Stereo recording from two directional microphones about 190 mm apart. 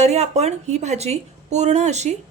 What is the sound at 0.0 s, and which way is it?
A woman's voice, 35° right (ahead or behind).